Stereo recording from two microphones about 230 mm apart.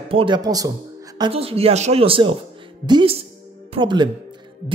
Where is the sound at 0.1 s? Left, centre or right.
Right.